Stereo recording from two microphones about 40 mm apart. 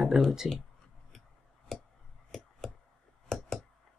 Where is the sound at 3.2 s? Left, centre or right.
Centre.